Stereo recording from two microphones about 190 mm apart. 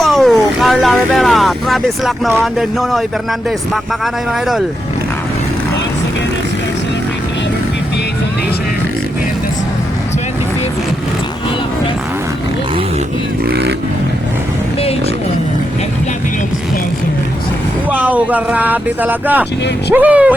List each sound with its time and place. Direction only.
0.0 s vehicle: centre (ahead or behind)
2.4 s speech: centre (ahead or behind)
4.0 s speech: centre (ahead or behind)
13.5 s speech: 60° right (ahead or behind)
17.9 s speech: 10° right (ahead or behind)